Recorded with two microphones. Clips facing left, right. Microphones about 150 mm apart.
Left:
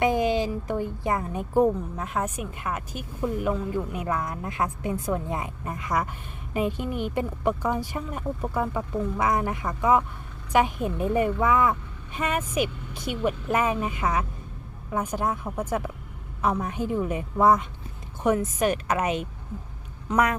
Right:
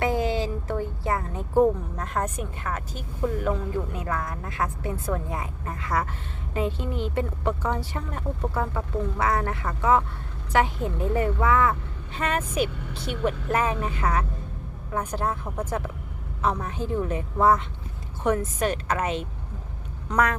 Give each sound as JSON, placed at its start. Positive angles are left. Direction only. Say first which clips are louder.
{"t": 0.0, "sound": "a woman's voice", "louder": "left 2 dB", "side_deg": 20}
{"t": 4.0, "sound": "a woman's voice", "louder": "left 2 dB", "side_deg": 20}